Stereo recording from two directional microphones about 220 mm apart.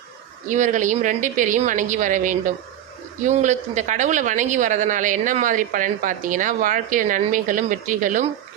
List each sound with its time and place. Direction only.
0.4 s speech: 35° right (ahead or behind)